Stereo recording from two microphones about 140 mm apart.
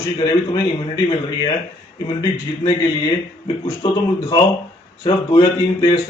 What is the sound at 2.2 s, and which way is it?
Speech, 35° left (ahead or behind).